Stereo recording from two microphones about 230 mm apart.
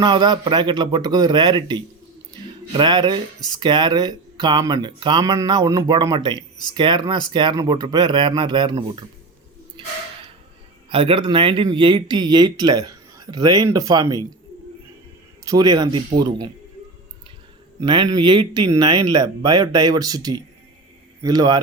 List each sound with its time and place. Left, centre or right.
0.0 s speech: centre
10.8 s speech: right
15.4 s speech: centre
17.7 s speech: centre